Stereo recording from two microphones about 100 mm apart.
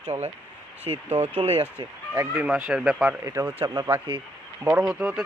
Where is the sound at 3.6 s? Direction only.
40° right (ahead or behind).